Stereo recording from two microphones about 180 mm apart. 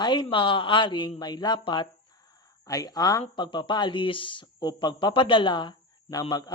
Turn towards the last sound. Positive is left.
turn(degrees=20)  # may be behind; listen again after turning